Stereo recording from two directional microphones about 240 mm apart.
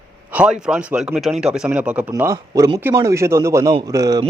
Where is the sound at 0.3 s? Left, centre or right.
Centre.